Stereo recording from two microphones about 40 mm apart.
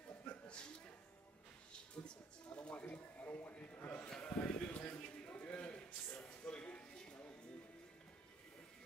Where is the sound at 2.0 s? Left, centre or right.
Left.